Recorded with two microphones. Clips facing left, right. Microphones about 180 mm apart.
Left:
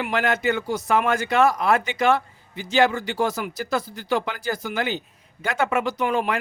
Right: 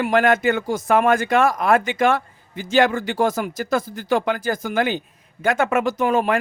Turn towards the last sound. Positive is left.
turn(degrees=-45)  # may be behind; listen again after turning